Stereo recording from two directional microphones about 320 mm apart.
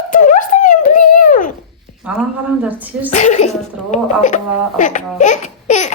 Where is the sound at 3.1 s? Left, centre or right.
Left.